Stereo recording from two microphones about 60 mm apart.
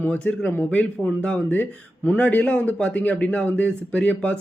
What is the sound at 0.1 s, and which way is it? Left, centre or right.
A man's voice, left.